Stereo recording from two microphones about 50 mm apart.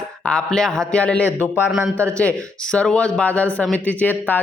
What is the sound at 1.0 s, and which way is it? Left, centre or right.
Speech, left.